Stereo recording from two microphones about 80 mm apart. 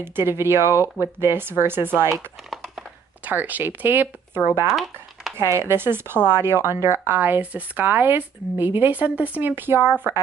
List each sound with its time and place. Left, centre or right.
0.0 s a woman's voice: right
3.3 s speech: right
4.6 s speech: centre
5.4 s a woman's voice: right